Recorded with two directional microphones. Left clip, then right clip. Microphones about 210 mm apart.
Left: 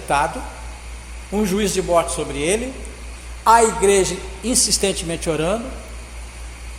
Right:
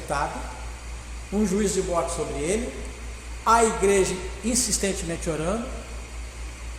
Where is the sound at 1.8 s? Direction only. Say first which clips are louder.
Left 6 dB; 35° left (ahead or behind).